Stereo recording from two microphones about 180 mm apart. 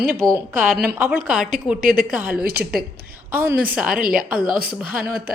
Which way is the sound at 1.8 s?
50° right (ahead or behind).